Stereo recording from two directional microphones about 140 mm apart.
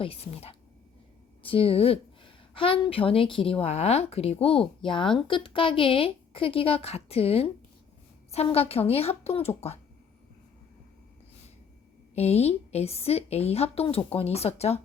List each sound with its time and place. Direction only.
0.0 s a woman's voice: 45° left (ahead or behind)
12.1 s a woman's voice: 50° left (ahead or behind)